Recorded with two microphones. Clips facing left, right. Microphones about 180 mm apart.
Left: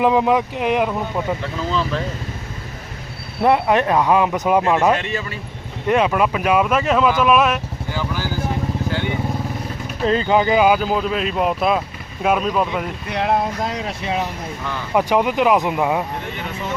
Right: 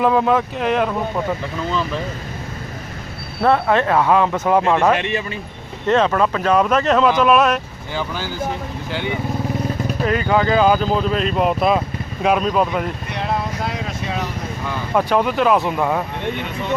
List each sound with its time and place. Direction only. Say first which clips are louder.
0.0 s speech: even; 15° left (ahead or behind)
3.4 s speech: even; 15° left (ahead or behind)
4.9 s speech: right 3 dB; 20° right (ahead or behind)
5.9 s speech: right 1 dB; 10° left (ahead or behind)
7.9 s speech: right 1 dB; 20° right (ahead or behind)
8.9 s vehicle: right 3 dB; 15° right (ahead or behind)
10.1 s speech: left 2 dB; 25° left (ahead or behind); by 12.8 s centre (ahead or behind)
13.1 s speech: left 5 dB; 65° left (ahead or behind)
14.9 s speech: even; 15° left (ahead or behind)